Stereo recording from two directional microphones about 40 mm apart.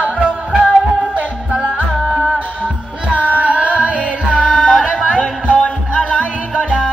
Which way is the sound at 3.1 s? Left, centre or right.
Right.